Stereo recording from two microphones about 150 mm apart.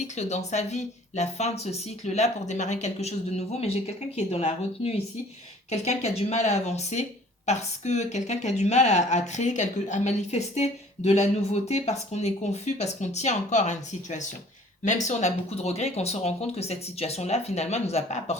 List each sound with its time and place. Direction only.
0.2 s speech: 50° left (ahead or behind)